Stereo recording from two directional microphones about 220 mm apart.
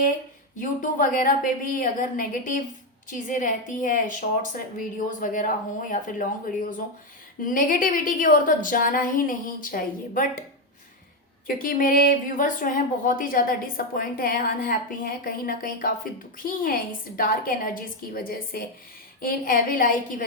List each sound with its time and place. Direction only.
0.6 s speech: 35° left (ahead or behind)
11.4 s speech: 40° left (ahead or behind)